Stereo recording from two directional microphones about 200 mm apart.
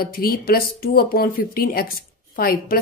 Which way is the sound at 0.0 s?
45° left (ahead or behind).